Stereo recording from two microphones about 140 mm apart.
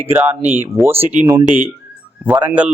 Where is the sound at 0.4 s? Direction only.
15° right (ahead or behind).